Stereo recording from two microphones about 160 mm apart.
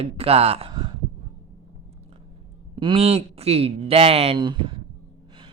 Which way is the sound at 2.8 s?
35° right (ahead or behind).